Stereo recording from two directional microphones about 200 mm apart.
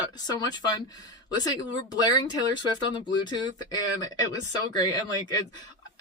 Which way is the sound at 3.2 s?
20° left (ahead or behind).